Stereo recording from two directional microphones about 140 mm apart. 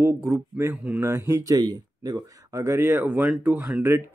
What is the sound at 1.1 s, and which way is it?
A man's voice, 20° right (ahead or behind).